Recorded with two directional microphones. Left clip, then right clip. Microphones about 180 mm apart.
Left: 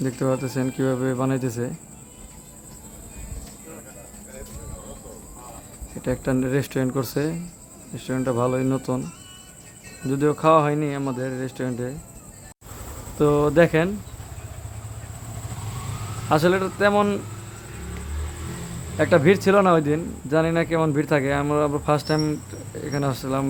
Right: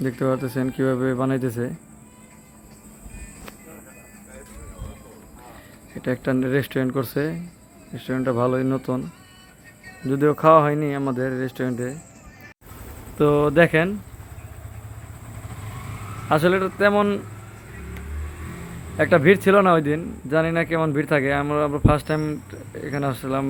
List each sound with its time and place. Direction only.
0.0 s speech: 5° right (ahead or behind)
6.0 s speech: 5° right (ahead or behind)
10.1 s speech: 15° right (ahead or behind)
13.1 s speech: 10° right (ahead or behind)
16.3 s speech: 5° right (ahead or behind)
18.9 s speech: 5° right (ahead or behind)